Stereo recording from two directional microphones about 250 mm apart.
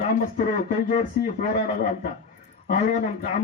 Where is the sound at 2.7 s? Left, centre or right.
Left.